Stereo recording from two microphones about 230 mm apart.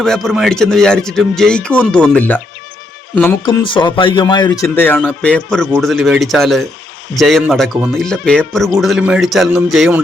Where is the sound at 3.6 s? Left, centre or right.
Left; by 10.0 s centre.